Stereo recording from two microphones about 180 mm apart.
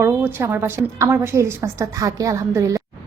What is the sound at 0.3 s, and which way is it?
A woman's voice, 15° right (ahead or behind).